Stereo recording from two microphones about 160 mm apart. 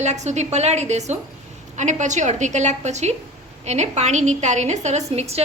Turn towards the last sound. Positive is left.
turn(degrees=-40)  # may be behind; listen again after turning